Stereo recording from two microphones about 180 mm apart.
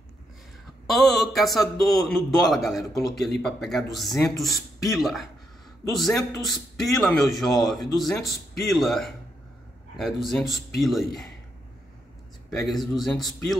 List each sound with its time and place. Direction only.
0.8 s speech: centre (ahead or behind)
12.4 s speech: centre (ahead or behind)